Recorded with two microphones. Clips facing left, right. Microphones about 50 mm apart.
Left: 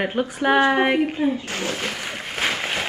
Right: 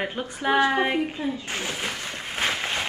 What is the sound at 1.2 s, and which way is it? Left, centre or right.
Speech, left.